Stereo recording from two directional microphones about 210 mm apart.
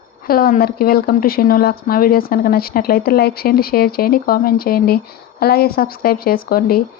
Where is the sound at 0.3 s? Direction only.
45° left (ahead or behind).